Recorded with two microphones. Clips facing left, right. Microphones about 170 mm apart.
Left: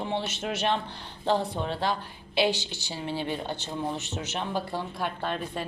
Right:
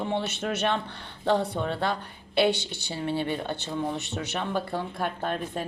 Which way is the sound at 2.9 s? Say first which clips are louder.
Right 3 dB; 60° right (ahead or behind).